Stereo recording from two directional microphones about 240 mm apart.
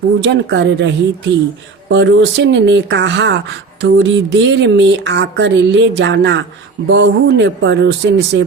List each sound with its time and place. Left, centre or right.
0.2 s speech: right